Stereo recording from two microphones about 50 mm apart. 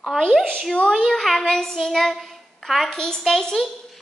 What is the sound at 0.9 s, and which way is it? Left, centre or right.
A child's voice, centre.